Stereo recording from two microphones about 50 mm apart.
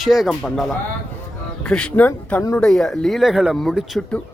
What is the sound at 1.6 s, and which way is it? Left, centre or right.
Speech, centre.